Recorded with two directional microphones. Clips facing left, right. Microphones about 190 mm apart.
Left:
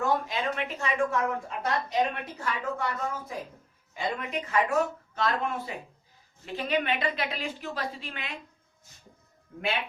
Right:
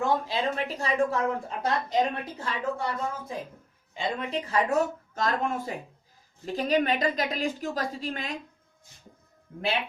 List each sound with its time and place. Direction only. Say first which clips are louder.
0.0 s a woman's voice: right 1 dB; 30° right (ahead or behind)